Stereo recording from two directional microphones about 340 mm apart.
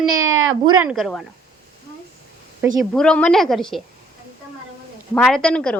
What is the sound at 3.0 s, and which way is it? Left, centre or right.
Speech, centre.